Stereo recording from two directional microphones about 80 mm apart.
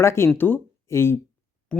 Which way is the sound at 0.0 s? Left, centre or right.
Left.